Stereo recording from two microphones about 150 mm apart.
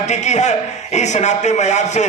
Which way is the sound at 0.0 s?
50° left (ahead or behind).